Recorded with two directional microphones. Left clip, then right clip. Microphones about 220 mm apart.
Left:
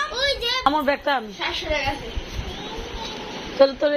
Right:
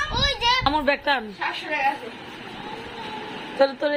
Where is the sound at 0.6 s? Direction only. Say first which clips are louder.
Left 1 dB; 10° right (ahead or behind).